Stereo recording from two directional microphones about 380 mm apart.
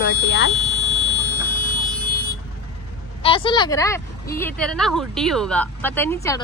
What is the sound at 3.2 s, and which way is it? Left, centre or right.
A woman's voice, centre.